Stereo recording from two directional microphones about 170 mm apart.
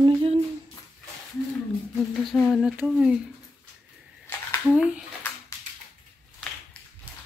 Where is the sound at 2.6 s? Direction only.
10° right (ahead or behind).